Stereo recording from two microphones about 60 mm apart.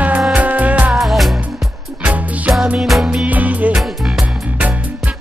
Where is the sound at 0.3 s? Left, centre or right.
Right.